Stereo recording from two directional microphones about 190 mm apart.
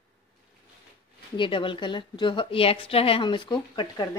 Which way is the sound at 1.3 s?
25° left (ahead or behind).